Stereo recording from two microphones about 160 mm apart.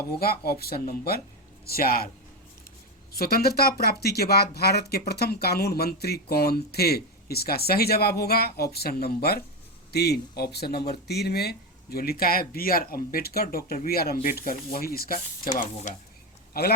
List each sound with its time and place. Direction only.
0.2 s speech: 75° left (ahead or behind)
3.1 s speech: 75° left (ahead or behind); by 16.0 s 50° left (ahead or behind)
16.5 s speech: 75° left (ahead or behind)